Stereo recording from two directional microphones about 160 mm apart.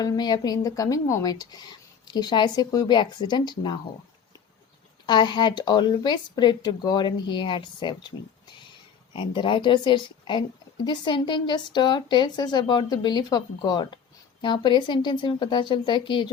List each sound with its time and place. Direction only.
0.0 s speech: 25° left (ahead or behind)
5.0 s speech: 30° left (ahead or behind)
9.1 s speech: 30° left (ahead or behind)